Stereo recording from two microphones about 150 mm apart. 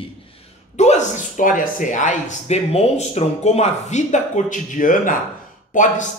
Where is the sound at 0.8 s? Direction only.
50° left (ahead or behind).